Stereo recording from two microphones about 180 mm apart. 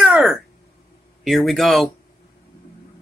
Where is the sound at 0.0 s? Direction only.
5° right (ahead or behind).